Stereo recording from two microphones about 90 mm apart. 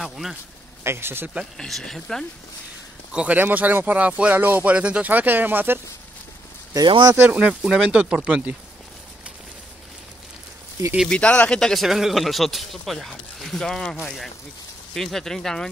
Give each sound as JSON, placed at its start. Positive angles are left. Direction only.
{"t": 0.0, "sound": "a man's voice", "side_deg": 0}
{"t": 0.8, "sound": "speech", "side_deg": -25}
{"t": 1.4, "sound": "a man's voice", "side_deg": 5}
{"t": 3.1, "sound": "speech", "side_deg": -15}
{"t": 7.2, "sound": "speech", "side_deg": -15}
{"t": 11.1, "sound": "a man's voice", "side_deg": 10}